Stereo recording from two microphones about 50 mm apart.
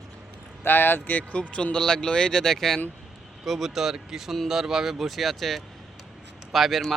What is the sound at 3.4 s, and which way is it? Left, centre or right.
Speech, centre.